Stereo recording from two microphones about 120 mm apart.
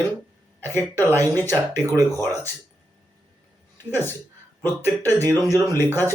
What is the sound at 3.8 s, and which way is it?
Speech, 20° left (ahead or behind).